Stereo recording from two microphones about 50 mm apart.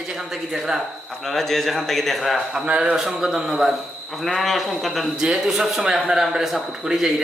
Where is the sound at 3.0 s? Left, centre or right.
Centre.